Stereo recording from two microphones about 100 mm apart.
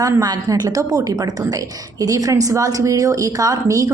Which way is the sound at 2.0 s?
35° right (ahead or behind).